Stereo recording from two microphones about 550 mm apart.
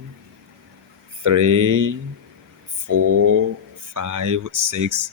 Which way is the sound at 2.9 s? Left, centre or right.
Right.